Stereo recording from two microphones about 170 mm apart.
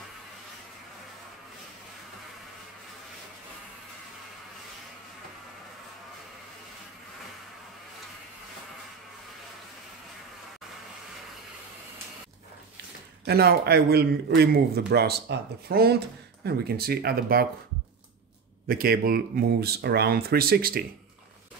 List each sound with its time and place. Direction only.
13.2 s a man's voice: 70° right (ahead or behind)
18.7 s speech: 65° right (ahead or behind)